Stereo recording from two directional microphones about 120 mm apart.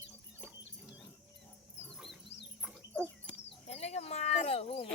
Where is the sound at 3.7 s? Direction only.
70° left (ahead or behind).